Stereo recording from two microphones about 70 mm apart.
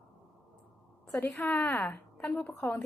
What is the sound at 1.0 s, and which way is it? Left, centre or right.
A woman's voice, left.